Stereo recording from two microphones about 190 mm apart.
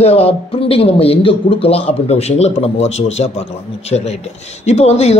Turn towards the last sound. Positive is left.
turn(degrees=35)  # may be behind; listen again after turning